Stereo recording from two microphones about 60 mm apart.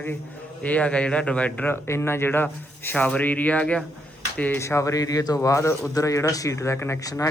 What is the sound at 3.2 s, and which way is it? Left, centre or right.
Speech, left.